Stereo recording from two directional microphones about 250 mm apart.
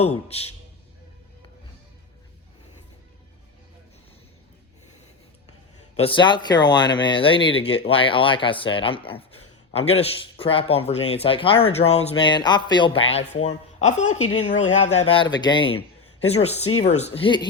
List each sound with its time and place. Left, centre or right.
6.0 s speech: centre